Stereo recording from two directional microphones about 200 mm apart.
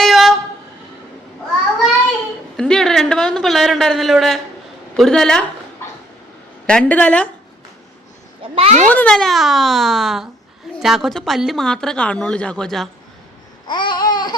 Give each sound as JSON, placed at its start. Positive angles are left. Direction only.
{"t": 0.0, "sound": "vehicle", "side_deg": 0}
{"t": 2.6, "sound": "a woman's voice", "side_deg": 5}
{"t": 6.7, "sound": "a woman's voice", "side_deg": 5}
{"t": 8.5, "sound": "a child's voice", "side_deg": -30}
{"t": 8.9, "sound": "a woman's voice", "side_deg": 5}
{"t": 13.7, "sound": "babbling", "side_deg": 25}